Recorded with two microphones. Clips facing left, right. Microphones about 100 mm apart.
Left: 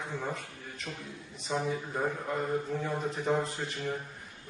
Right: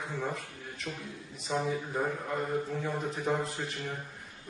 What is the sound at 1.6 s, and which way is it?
A man's voice, centre (ahead or behind).